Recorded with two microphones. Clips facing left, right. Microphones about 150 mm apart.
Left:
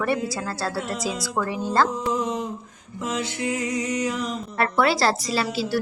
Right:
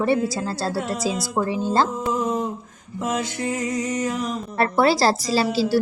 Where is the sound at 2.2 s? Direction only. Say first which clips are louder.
Right 3 dB; 45° right (ahead or behind).